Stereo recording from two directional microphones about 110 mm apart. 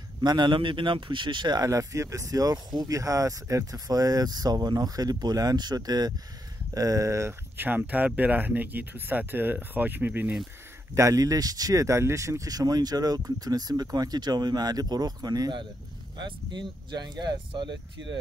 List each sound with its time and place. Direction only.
0.2 s speech: 40° right (ahead or behind); by 10.3 s 15° right (ahead or behind)
11.0 s speech: 30° right (ahead or behind)